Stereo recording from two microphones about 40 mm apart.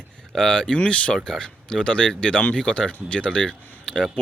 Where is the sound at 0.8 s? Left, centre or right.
Left.